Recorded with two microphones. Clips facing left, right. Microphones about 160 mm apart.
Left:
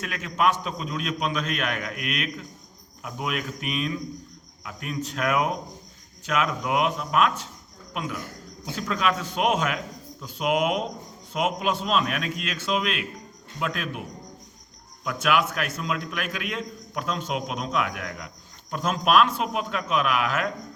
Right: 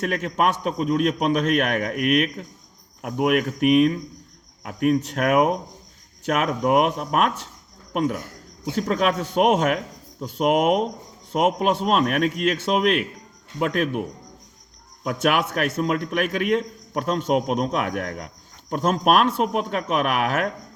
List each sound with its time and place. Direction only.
0.0 s a man's voice: 60° right (ahead or behind)
15.0 s a man's voice: 60° right (ahead or behind)